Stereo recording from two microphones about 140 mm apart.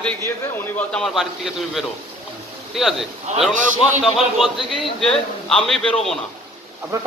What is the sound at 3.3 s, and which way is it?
Speech, 55° right (ahead or behind).